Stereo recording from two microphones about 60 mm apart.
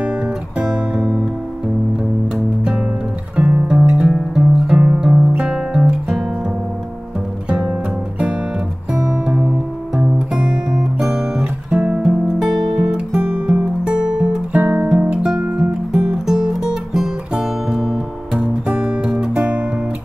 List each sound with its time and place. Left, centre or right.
0.0 s guitar: centre
2.3 s music: centre
7.4 s music: centre
8.9 s music: centre
9.9 s guitar: centre
15.0 s music: centre